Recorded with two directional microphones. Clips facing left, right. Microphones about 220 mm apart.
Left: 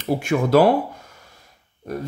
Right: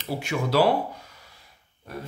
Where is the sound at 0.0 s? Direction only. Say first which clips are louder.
Left 7 dB; 50° left (ahead or behind).